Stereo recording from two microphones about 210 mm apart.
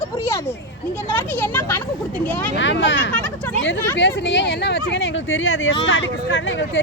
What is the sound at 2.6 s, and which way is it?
Speech, 60° left (ahead or behind).